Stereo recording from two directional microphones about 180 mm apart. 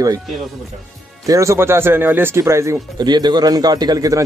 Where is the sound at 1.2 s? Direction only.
15° right (ahead or behind).